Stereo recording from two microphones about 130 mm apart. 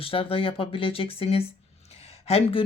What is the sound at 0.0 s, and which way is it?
Speech, 45° left (ahead or behind).